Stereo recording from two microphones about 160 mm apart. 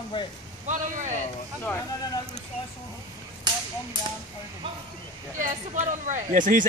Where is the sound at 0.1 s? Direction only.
30° left (ahead or behind).